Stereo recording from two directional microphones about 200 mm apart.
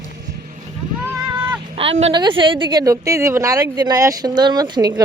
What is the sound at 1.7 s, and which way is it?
A woman's voice, 30° right (ahead or behind).